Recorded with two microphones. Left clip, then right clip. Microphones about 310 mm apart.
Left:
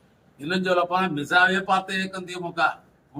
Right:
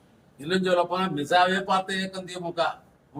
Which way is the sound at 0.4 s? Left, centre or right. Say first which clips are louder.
Left 1 dB; centre.